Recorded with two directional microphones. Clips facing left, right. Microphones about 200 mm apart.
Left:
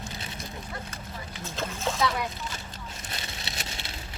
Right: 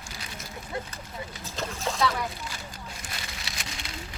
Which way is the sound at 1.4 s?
Centre (ahead or behind).